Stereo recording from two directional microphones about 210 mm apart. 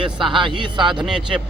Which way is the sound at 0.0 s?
25° right (ahead or behind).